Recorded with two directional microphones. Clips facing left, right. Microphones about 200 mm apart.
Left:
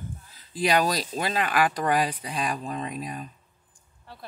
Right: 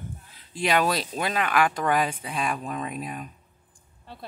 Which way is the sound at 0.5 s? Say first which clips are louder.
Left 2 dB; centre (ahead or behind).